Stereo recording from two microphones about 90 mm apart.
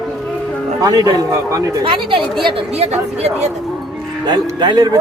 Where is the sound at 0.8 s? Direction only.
45° right (ahead or behind).